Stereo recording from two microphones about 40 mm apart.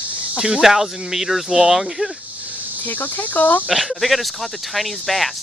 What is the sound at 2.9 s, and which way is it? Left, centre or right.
Speech, left.